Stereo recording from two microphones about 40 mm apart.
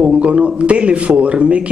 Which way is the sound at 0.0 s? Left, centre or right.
Right.